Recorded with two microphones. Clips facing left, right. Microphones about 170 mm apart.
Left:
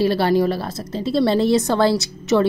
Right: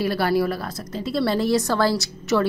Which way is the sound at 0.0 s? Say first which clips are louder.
Left 4 dB; 25° left (ahead or behind).